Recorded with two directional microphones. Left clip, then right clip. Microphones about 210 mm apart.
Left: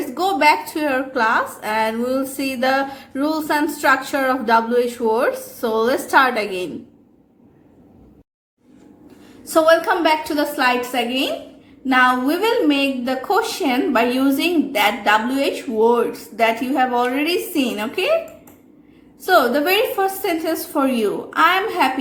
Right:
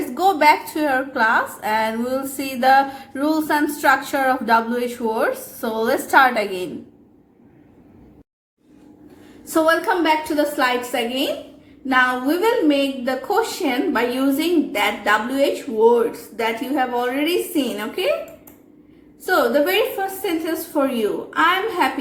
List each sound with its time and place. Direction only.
0.1 s a woman's voice: 15° left (ahead or behind)
9.5 s a woman's voice: 20° left (ahead or behind)
19.2 s a woman's voice: 20° left (ahead or behind)